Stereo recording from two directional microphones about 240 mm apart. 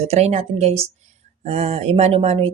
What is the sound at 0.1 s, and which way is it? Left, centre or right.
Speech, right.